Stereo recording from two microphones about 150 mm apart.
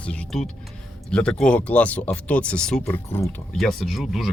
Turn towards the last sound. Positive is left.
turn(degrees=0)  # may be behind; listen again after turning